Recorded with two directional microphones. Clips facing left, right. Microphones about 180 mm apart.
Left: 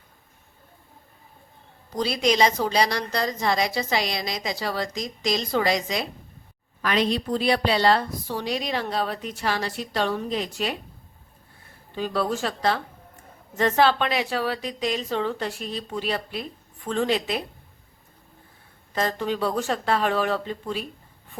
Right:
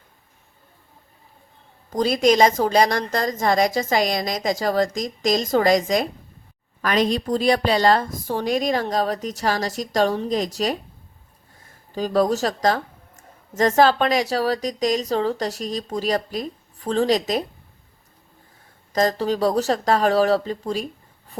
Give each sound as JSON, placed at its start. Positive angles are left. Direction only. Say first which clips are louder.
{"t": 1.9, "sound": "a woman's voice", "louder": "right 5 dB", "side_deg": -45}
{"t": 11.9, "sound": "a woman's voice", "louder": "right 6 dB", "side_deg": -40}
{"t": 18.9, "sound": "a woman's voice", "louder": "right 5 dB", "side_deg": -40}